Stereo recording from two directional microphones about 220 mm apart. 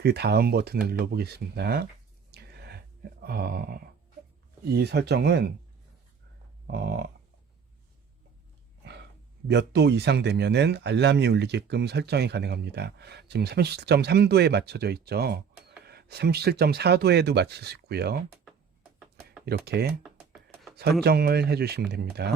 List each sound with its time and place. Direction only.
0.0 s speech: 50° right (ahead or behind)
2.3 s a sound: 45° right (ahead or behind)
4.7 s speech: 50° right (ahead or behind)
6.7 s speech: 50° right (ahead or behind)
9.5 s speech: 50° right (ahead or behind)
19.5 s speech: 45° right (ahead or behind)
20.0 s computer keyboard: 5° right (ahead or behind)
21.0 s speech: 45° right (ahead or behind)